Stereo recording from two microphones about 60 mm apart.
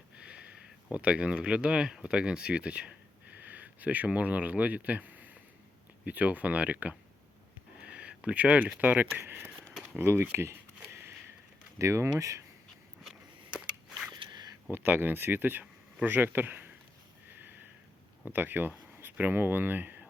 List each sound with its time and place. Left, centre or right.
0.2 s a sound: centre
0.9 s speech: right
7.8 s a sound: right
8.8 s speech: right
11.8 s speech: right
14.7 s speech: right
18.3 s speech: right